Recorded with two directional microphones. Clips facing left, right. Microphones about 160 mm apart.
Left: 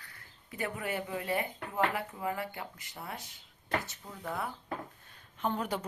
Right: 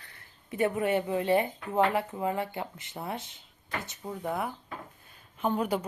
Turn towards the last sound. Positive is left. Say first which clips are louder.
# right 5 dB
turn(degrees=-10)  # may be behind; listen again after turning